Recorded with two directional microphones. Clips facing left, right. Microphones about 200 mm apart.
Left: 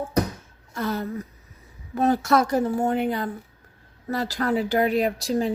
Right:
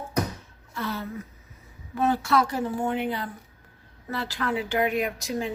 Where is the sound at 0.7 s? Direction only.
45° left (ahead or behind).